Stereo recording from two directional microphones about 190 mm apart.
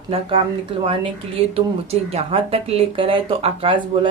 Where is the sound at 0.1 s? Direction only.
25° right (ahead or behind).